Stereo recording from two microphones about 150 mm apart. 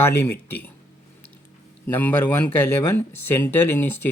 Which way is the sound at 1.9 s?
10° left (ahead or behind).